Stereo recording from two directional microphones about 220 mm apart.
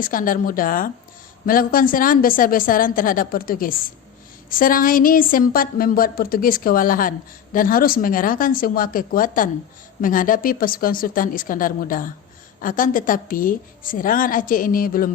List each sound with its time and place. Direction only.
0.0 s a woman's voice: 40° left (ahead or behind)